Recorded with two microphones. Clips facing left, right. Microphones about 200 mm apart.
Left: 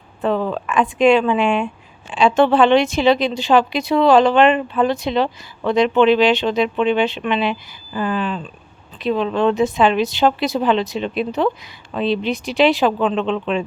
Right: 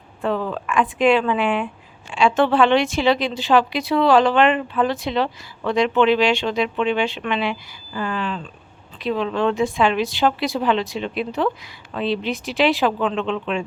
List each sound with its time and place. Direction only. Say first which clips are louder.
0.2 s speech: left 3 dB; 20° left (ahead or behind)
4.5 s speech: left 3 dB; 30° left (ahead or behind)
4.9 s speech: left 3 dB; 20° left (ahead or behind)
13.1 s speech: left 3 dB; 30° left (ahead or behind)